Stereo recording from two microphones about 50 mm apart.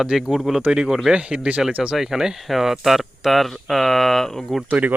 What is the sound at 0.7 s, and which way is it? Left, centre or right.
Speech, centre.